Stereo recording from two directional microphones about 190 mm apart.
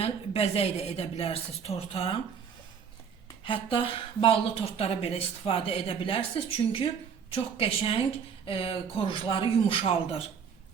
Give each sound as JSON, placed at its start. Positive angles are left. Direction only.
{"t": 0.0, "sound": "a woman's voice", "side_deg": 30}
{"t": 3.4, "sound": "speech", "side_deg": 25}